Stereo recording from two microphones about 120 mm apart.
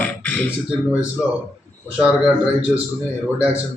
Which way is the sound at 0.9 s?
10° right (ahead or behind).